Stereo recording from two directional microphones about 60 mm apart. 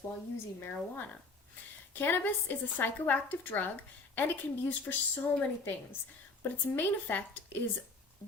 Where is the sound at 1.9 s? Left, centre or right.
Left.